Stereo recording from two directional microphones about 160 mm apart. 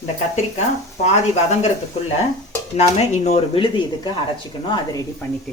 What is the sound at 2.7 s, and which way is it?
Speech, 45° left (ahead or behind).